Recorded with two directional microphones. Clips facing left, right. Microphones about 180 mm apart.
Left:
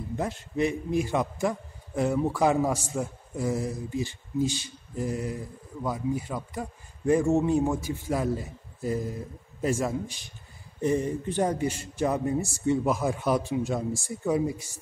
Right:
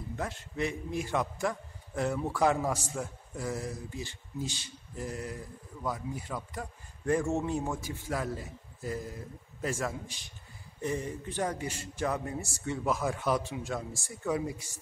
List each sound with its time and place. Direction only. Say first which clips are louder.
0.1 s a man's voice: left 6 dB; 15° left (ahead or behind)
9.6 s a man's voice: left 7 dB; 20° left (ahead or behind)